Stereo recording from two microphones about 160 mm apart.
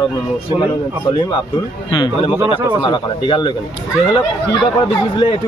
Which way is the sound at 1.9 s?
30° left (ahead or behind).